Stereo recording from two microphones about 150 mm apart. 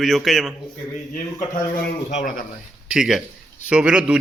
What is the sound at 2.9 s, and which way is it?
Speech, 5° right (ahead or behind).